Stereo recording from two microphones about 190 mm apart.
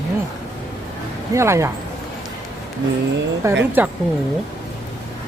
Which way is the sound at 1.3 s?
15° right (ahead or behind).